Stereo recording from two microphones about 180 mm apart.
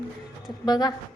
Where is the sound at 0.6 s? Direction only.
20° left (ahead or behind).